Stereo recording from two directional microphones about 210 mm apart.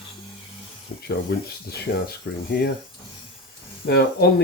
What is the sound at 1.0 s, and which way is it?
Speech, 50° left (ahead or behind).